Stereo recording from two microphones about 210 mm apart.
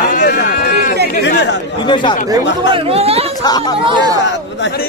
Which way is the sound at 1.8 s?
20° left (ahead or behind).